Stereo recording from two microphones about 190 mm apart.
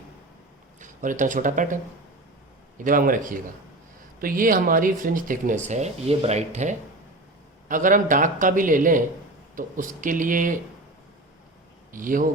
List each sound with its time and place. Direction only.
0.8 s speech: 40° right (ahead or behind)
11.9 s a man's voice: 45° right (ahead or behind)